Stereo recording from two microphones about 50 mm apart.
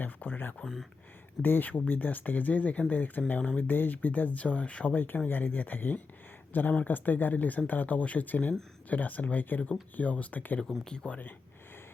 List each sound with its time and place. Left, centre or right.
0.0 s speech: left
0.6 s speech: centre
1.4 s speech: left
4.9 s speech: left
10.8 s speech: centre